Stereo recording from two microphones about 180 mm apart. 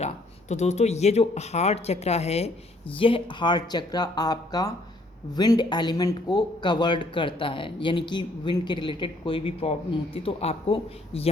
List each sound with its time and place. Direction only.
0.0 s speech: 40° left (ahead or behind)